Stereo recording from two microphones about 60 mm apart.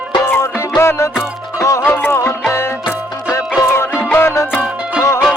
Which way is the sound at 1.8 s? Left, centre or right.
Left.